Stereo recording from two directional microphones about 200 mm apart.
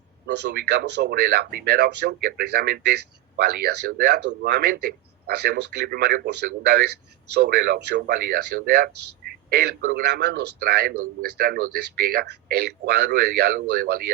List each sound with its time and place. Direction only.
0.4 s a man's voice: 55° right (ahead or behind)